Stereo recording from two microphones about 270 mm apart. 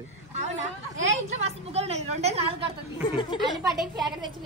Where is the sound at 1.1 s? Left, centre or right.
Right.